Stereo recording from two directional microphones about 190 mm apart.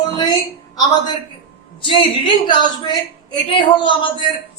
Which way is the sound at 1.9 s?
25° left (ahead or behind).